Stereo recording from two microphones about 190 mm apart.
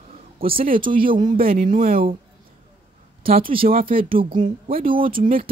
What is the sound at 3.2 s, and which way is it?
Speech, 50° right (ahead or behind).